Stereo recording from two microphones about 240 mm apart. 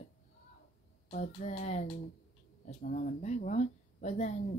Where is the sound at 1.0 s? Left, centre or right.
Left.